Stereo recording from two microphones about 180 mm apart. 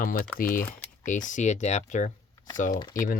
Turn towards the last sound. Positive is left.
turn(degrees=50)  # may be behind; listen again after turning